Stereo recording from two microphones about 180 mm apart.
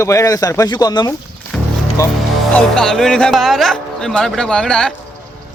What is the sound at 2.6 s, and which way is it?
Speech, 5° left (ahead or behind).